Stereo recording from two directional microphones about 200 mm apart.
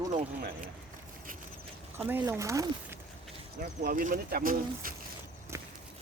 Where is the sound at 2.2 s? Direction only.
15° right (ahead or behind).